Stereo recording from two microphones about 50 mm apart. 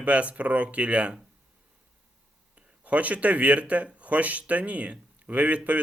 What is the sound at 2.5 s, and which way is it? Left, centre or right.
A man's voice, right.